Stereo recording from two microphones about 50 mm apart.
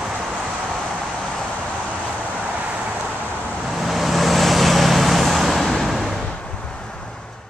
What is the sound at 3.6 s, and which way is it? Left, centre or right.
Vehicle, centre.